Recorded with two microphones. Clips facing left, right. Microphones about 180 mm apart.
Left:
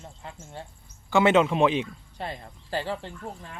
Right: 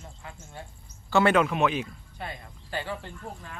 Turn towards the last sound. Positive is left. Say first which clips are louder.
# left 4 dB
turn(degrees=35)  # may be behind; listen again after turning